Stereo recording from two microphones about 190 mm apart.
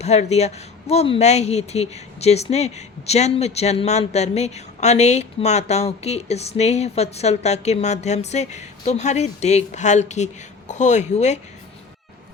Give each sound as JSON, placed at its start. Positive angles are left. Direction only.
{"t": 0.0, "sound": "speech", "side_deg": 35}